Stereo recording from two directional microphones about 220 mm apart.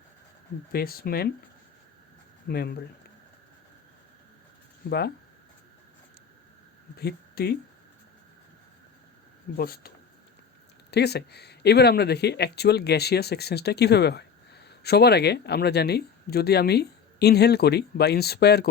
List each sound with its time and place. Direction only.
0.7 s speech: 45° left (ahead or behind)
2.5 s speech: 45° left (ahead or behind)
4.9 s speech: 45° left (ahead or behind)
7.0 s speech: 45° left (ahead or behind)
9.6 s speech: 45° left (ahead or behind)
10.9 s speech: 50° left (ahead or behind)